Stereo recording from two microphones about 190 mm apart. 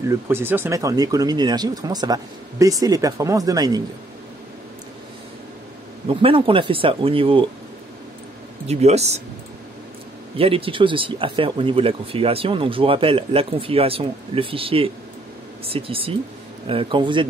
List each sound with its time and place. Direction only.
0.1 s speech: 10° right (ahead or behind)
6.0 s speech: 30° right (ahead or behind)
8.6 s speech: 35° right (ahead or behind)
10.3 s speech: 30° right (ahead or behind)